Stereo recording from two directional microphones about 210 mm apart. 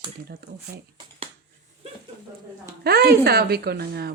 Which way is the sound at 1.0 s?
25° right (ahead or behind).